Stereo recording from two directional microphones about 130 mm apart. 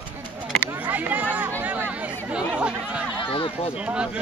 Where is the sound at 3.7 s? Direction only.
10° right (ahead or behind).